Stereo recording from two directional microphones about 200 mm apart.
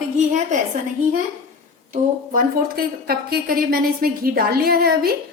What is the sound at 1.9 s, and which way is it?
A woman's voice, 45° right (ahead or behind).